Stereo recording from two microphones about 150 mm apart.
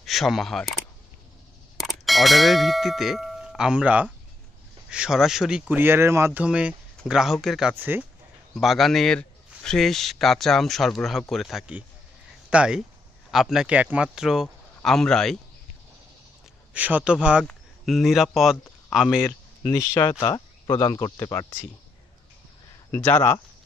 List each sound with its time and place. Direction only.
0.0 s speech: centre (ahead or behind)
1.8 s a man's voice: centre (ahead or behind)
7.7 s speech: 10° right (ahead or behind)
8.5 s a man's voice: centre (ahead or behind)
16.7 s speech: 10° right (ahead or behind)
19.7 s speech: 20° left (ahead or behind)
22.8 s speech: 15° left (ahead or behind)